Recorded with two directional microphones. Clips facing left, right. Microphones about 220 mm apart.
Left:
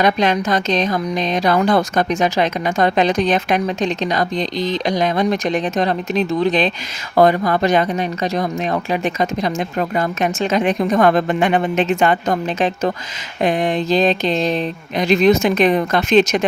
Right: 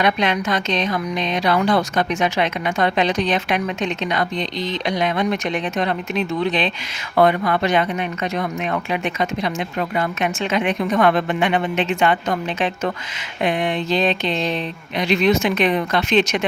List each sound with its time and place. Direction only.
0.0 s speech: 40° left (ahead or behind)